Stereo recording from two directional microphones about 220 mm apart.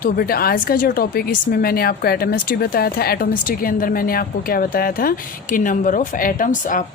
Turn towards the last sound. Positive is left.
turn(degrees=35)  # may be behind; listen again after turning